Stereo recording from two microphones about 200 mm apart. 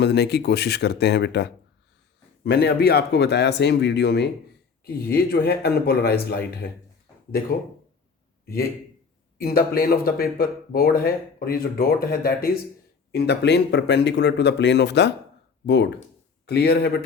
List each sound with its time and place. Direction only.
0.0 s speech: 55° left (ahead or behind)
9.4 s speech: 50° left (ahead or behind)